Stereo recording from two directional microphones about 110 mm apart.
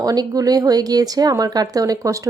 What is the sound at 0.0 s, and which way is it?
Speech, 35° right (ahead or behind).